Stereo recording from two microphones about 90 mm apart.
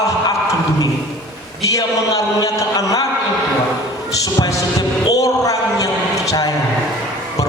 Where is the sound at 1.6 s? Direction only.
40° left (ahead or behind).